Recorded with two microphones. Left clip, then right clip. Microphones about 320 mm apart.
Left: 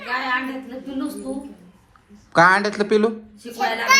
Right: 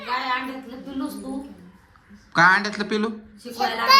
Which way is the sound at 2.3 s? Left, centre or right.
Centre.